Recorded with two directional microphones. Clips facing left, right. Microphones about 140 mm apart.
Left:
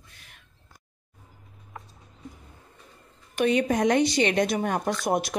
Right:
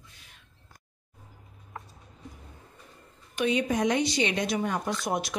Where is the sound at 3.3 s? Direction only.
55° left (ahead or behind).